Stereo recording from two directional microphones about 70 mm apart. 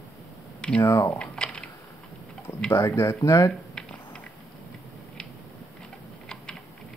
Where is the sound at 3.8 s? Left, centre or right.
Centre.